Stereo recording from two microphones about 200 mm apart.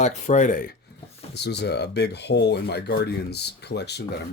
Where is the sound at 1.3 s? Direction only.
55° left (ahead or behind).